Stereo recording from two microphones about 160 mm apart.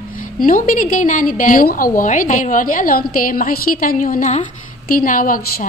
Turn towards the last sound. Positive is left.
turn(degrees=65)  # may be behind; listen again after turning